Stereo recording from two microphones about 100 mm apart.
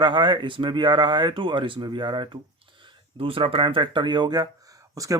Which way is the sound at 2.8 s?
65° right (ahead or behind).